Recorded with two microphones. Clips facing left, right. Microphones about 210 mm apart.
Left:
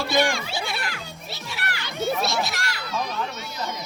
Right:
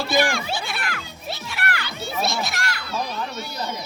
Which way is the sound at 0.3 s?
55° right (ahead or behind).